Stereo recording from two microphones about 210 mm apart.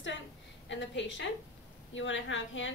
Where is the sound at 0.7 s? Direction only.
60° left (ahead or behind).